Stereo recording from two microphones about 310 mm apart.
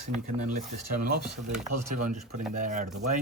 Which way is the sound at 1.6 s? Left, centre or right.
Right.